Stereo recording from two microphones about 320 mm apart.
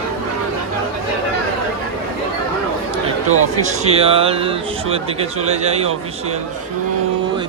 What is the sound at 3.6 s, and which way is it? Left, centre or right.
A man's voice, centre.